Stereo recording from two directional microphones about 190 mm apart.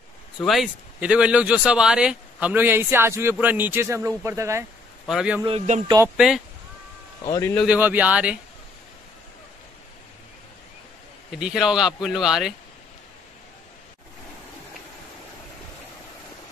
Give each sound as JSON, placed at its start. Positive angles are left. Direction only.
{"t": 0.4, "sound": "speech", "side_deg": 0}
{"t": 5.0, "sound": "a man's voice", "side_deg": -5}
{"t": 5.4, "sound": "speech", "side_deg": -25}
{"t": 6.1, "sound": "speech", "side_deg": 0}
{"t": 7.2, "sound": "speech", "side_deg": 15}
{"t": 7.6, "sound": "speech", "side_deg": -10}
{"t": 11.3, "sound": "speech", "side_deg": -5}